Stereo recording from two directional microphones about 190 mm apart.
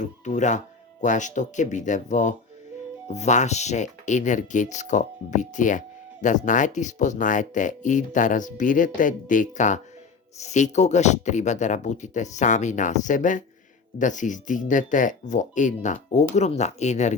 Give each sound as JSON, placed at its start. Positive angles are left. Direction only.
{"t": 0.0, "sound": "speech", "side_deg": 40}